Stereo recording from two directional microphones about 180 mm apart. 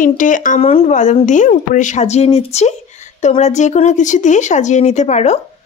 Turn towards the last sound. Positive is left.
turn(degrees=40)  # may be behind; listen again after turning